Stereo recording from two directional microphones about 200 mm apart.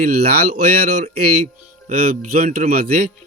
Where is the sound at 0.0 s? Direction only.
50° right (ahead or behind).